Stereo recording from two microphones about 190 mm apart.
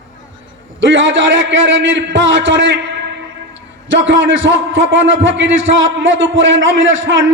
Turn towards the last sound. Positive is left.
turn(degrees=-80)